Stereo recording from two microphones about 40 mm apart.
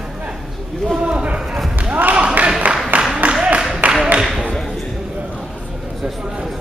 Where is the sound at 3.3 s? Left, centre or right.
Right.